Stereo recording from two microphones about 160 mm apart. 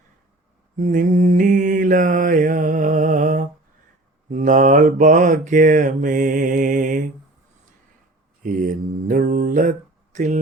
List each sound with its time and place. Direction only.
0.8 s mantra: 55° right (ahead or behind)
8.4 s mantra: 55° right (ahead or behind)